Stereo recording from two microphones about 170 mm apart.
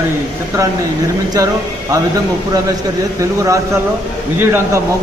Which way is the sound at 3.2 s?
20° right (ahead or behind).